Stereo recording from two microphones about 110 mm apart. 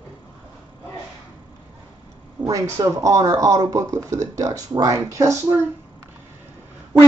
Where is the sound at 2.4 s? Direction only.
30° right (ahead or behind).